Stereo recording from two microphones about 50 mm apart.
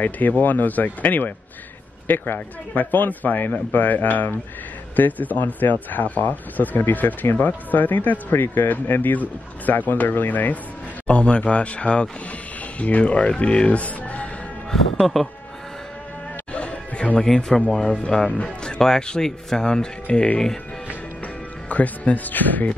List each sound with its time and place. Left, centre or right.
0.0 s speech: left
14.7 s speech: centre
16.5 s music: left
17.2 s speech: centre
21.6 s speech: left